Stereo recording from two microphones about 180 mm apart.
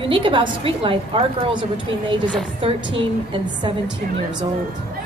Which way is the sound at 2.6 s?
30° right (ahead or behind).